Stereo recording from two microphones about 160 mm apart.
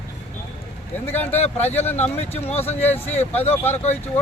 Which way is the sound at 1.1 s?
15° left (ahead or behind).